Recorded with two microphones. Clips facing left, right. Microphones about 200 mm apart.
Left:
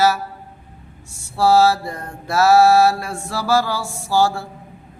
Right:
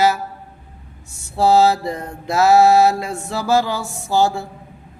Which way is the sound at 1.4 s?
20° right (ahead or behind).